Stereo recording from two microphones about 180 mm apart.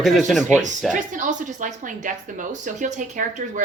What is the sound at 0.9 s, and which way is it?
A woman's voice, 45° right (ahead or behind).